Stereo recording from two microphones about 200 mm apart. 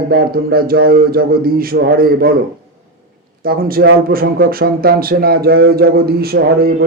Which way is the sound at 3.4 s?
50° right (ahead or behind).